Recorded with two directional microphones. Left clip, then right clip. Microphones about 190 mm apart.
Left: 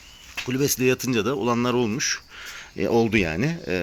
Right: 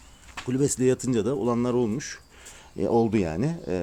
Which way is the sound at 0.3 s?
10° right (ahead or behind).